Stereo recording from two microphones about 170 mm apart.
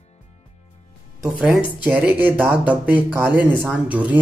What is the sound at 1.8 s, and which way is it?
A man's voice, 10° right (ahead or behind).